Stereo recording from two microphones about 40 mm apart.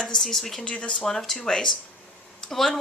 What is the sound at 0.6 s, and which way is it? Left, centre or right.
Speech, left.